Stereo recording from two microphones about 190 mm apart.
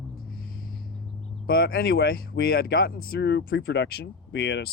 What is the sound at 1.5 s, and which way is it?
Speech, 55° left (ahead or behind).